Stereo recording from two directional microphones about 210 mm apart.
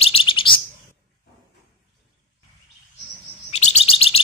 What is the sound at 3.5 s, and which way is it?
Chirp, 30° left (ahead or behind).